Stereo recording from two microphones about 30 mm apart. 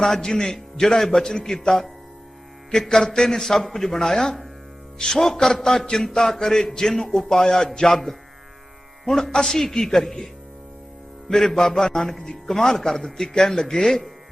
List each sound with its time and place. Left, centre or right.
0.2 s a man's voice: left
2.9 s a man's voice: centre
9.0 s a man's voice: centre
11.3 s a man's voice: centre
13.2 s a man's voice: left